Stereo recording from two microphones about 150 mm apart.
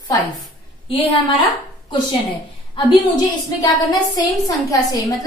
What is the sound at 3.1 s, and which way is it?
A woman's voice, 25° left (ahead or behind).